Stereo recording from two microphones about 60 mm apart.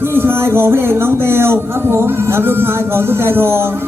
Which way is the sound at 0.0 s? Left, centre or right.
Right.